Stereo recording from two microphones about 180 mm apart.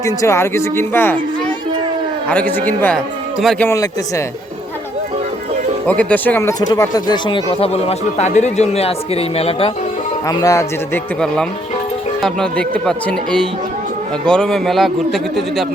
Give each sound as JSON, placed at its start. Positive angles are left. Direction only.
{"t": 0.0, "sound": "speech", "side_deg": 15}
{"t": 2.3, "sound": "a man's voice", "side_deg": 10}
{"t": 3.7, "sound": "speech", "side_deg": 15}
{"t": 5.8, "sound": "speech", "side_deg": 10}
{"t": 10.2, "sound": "speech", "side_deg": 20}
{"t": 12.2, "sound": "a man's voice", "side_deg": 5}